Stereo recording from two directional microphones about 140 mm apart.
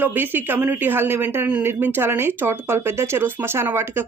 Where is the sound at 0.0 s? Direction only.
15° right (ahead or behind).